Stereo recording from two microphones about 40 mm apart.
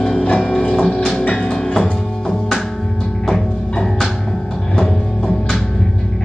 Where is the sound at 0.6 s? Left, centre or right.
Left.